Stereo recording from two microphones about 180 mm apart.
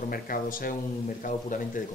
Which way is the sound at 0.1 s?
50° left (ahead or behind).